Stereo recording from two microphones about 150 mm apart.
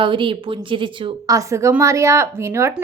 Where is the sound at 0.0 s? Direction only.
35° right (ahead or behind).